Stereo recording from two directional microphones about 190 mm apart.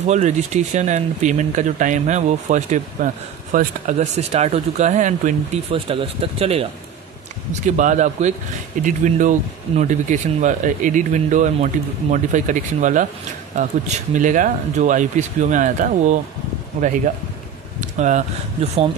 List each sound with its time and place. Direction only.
0.1 s speech: 40° right (ahead or behind)